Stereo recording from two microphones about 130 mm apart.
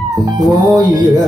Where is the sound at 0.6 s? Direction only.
30° right (ahead or behind).